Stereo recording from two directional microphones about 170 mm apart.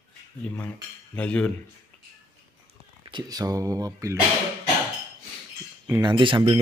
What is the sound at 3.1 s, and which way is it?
Speech, 25° right (ahead or behind).